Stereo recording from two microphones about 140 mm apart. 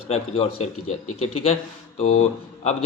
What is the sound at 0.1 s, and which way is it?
Speech, 45° left (ahead or behind).